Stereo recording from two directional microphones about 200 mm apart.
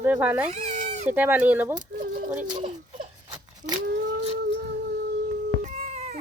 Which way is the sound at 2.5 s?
25° right (ahead or behind).